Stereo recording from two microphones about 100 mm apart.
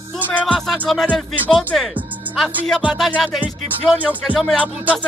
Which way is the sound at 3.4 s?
15° right (ahead or behind).